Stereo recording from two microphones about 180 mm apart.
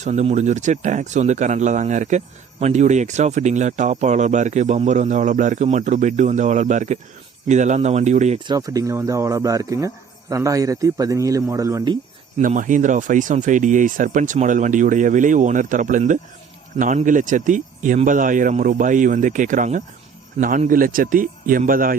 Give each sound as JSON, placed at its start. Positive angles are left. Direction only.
{"t": 0.0, "sound": "speech", "side_deg": -40}
{"t": 8.4, "sound": "speech", "side_deg": -20}
{"t": 12.4, "sound": "speech", "side_deg": -45}